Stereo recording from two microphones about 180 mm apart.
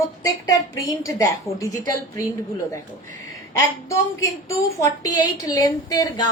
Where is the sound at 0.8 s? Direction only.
15° left (ahead or behind).